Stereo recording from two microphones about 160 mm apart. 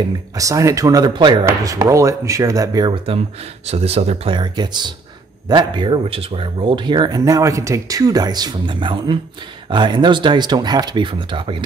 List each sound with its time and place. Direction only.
0.3 s speech: 20° right (ahead or behind)
3.6 s speech: 40° right (ahead or behind)